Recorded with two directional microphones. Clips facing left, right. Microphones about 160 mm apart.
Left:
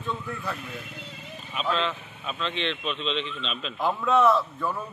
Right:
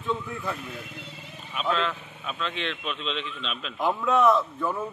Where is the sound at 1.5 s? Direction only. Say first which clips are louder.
Even; centre (ahead or behind).